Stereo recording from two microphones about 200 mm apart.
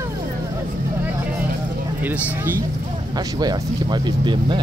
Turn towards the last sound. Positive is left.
turn(degrees=-25)  # may be behind; listen again after turning